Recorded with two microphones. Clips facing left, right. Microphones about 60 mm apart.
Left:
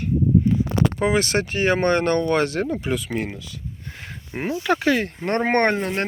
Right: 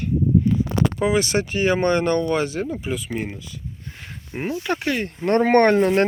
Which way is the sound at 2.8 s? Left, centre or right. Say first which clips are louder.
Left 2 dB; left.